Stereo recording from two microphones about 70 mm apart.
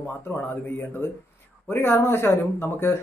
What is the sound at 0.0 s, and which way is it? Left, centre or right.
Speech, left.